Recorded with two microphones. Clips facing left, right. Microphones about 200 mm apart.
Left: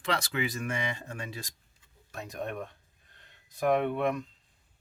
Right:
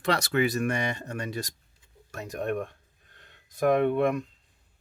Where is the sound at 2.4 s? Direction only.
50° right (ahead or behind).